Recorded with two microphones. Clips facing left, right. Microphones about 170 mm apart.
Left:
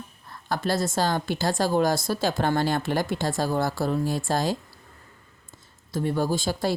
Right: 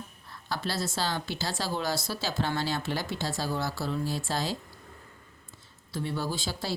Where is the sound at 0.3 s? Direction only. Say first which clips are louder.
Left 8 dB; 50° left (ahead or behind).